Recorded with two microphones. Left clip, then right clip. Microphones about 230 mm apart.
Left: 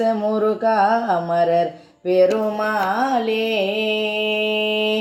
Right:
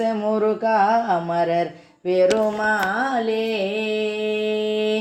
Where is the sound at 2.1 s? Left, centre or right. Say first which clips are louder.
Left 1 dB; right.